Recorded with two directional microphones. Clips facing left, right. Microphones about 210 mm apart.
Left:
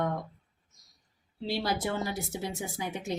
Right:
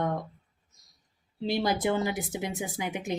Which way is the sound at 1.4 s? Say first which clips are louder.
Right 4 dB; 20° right (ahead or behind).